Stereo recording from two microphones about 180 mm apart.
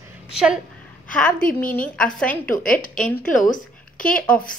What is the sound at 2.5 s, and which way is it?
A woman's voice, 50° left (ahead or behind).